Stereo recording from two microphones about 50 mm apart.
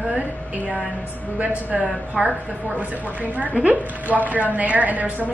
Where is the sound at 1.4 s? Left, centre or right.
Right.